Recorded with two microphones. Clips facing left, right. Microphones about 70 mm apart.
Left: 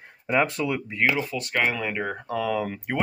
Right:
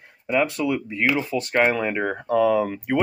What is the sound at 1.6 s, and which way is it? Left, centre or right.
Speech, centre.